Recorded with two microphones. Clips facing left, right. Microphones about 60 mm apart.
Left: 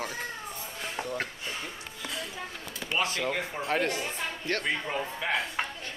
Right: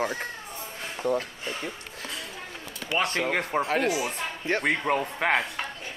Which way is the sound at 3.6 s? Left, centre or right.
Centre.